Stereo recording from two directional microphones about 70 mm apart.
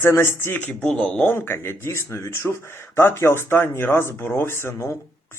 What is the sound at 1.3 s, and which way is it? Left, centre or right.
Speech, left.